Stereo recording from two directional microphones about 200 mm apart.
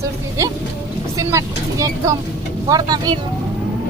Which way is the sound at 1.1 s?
15° right (ahead or behind).